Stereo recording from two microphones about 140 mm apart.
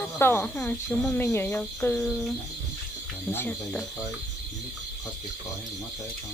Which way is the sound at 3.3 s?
15° left (ahead or behind).